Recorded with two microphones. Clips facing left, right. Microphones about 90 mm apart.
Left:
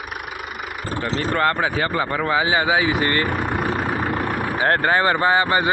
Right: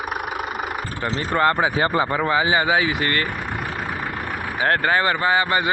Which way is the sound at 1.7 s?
20° right (ahead or behind).